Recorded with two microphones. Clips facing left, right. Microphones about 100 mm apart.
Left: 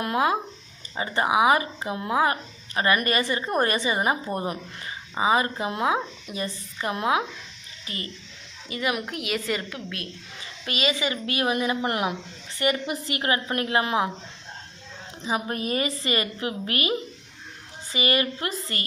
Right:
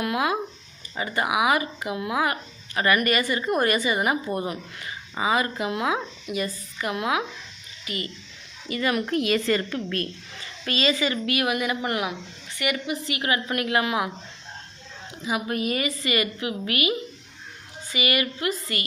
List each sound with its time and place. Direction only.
0.0 s a woman's voice: 30° left (ahead or behind)
8.7 s a woman's voice: 15° left (ahead or behind)
10.7 s a woman's voice: 20° left (ahead or behind)
15.2 s a woman's voice: 30° left (ahead or behind)
17.9 s a woman's voice: 35° left (ahead or behind)